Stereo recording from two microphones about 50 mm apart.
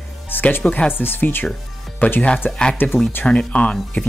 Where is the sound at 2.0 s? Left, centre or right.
Left.